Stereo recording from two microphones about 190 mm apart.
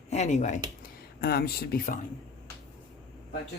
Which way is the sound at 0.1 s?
35° left (ahead or behind).